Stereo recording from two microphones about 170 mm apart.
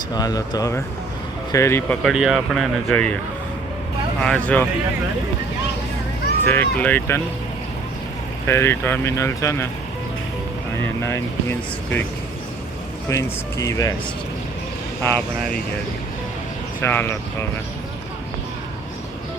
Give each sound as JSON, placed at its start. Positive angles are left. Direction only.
{"t": 0.1, "sound": "speech", "side_deg": 20}
{"t": 2.0, "sound": "speech", "side_deg": -5}
{"t": 4.2, "sound": "speech", "side_deg": 5}
{"t": 6.4, "sound": "speech", "side_deg": 10}
{"t": 8.4, "sound": "speech", "side_deg": 15}
{"t": 11.0, "sound": "speech", "side_deg": 15}
{"t": 13.1, "sound": "speech", "side_deg": 20}
{"t": 15.0, "sound": "speech", "side_deg": 10}
{"t": 16.8, "sound": "speech", "side_deg": 15}